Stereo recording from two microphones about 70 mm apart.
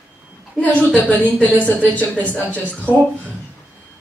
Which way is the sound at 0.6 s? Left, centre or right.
Left.